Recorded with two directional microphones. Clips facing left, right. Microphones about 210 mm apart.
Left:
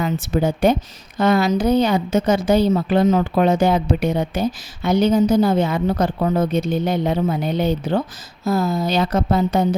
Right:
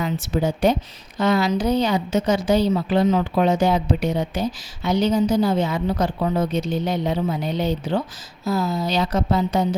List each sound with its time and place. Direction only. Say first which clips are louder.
0.0 s a woman's voice: left 3 dB; 55° left (ahead or behind)